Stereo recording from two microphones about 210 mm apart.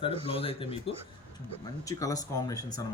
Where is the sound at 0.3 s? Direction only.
25° left (ahead or behind).